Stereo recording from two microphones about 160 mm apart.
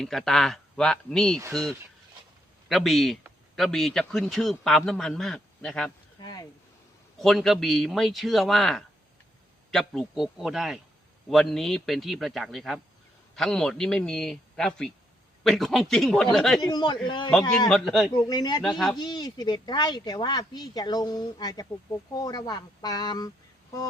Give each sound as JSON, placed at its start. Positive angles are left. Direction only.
{"t": 0.0, "sound": "speech", "side_deg": 0}
{"t": 2.6, "sound": "speech", "side_deg": 0}
{"t": 6.1, "sound": "a sound", "side_deg": 25}
{"t": 7.2, "sound": "speech", "side_deg": 0}
{"t": 16.6, "sound": "speech", "side_deg": 25}
{"t": 17.7, "sound": "speech", "side_deg": 0}
{"t": 18.2, "sound": "speech", "side_deg": 25}
{"t": 18.6, "sound": "speech", "side_deg": 0}
{"t": 18.9, "sound": "speech", "side_deg": 25}